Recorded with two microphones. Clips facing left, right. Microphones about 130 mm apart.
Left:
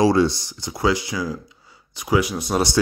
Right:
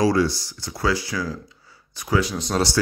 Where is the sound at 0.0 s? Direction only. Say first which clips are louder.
Left 3 dB; 25° left (ahead or behind).